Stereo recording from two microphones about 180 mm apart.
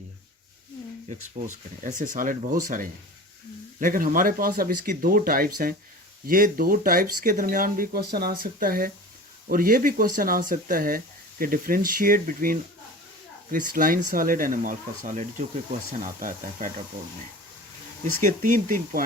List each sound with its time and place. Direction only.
1.4 s speech: 40° right (ahead or behind)
18.2 s speech: 45° right (ahead or behind)